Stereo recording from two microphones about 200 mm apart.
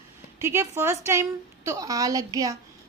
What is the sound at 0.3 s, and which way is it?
A woman's voice, 15° right (ahead or behind).